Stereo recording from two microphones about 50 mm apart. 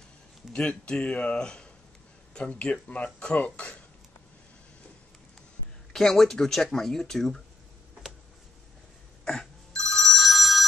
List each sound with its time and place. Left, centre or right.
0.5 s speech: centre
5.9 s speech: centre
9.2 s telephone bell ringing: centre